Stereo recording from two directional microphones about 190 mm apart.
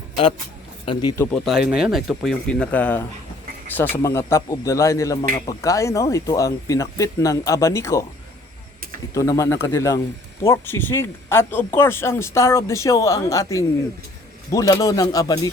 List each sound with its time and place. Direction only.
1.1 s speech: 10° left (ahead or behind)
1.5 s speech: 5° right (ahead or behind); by 8.0 s 15° left (ahead or behind)
9.1 s speech: 15° left (ahead or behind)